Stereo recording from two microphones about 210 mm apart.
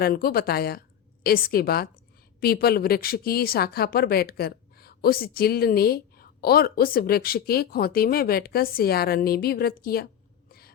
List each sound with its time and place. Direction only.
0.0 s a woman's voice: 45° left (ahead or behind)